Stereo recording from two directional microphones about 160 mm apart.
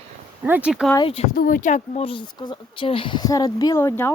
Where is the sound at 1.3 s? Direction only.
60° left (ahead or behind).